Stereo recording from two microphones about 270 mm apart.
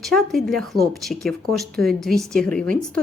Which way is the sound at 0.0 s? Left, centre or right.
Centre.